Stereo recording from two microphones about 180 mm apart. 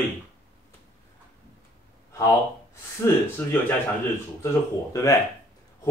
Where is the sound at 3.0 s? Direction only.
10° left (ahead or behind).